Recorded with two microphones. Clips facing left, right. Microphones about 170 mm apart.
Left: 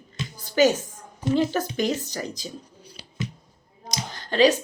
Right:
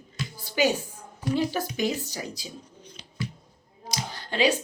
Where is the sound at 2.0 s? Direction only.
10° right (ahead or behind).